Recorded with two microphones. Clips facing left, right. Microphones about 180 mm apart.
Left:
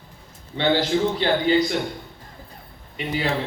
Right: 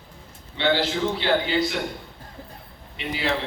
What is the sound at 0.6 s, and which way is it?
Speech, 45° left (ahead or behind).